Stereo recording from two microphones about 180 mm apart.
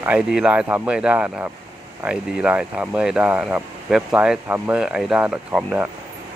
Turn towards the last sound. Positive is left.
turn(degrees=-10)  # may be behind; listen again after turning